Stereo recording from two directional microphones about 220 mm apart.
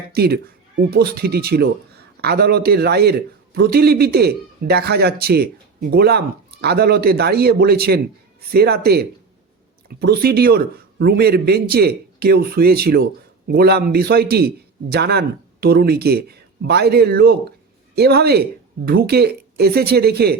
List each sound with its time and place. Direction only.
0.1 s a man's voice: 45° right (ahead or behind)